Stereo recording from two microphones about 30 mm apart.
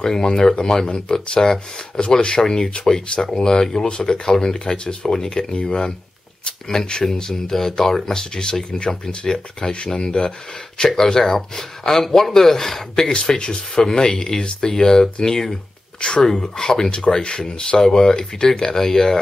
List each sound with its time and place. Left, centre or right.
0.0 s speech: left
2.0 s speech: left
5.5 s speech: left
6.4 s speech: left
13.1 s speech: left
16.0 s speech: left
17.0 s speech: left